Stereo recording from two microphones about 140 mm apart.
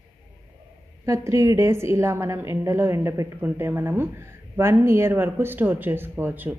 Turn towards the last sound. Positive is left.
turn(degrees=-15)  # may be behind; listen again after turning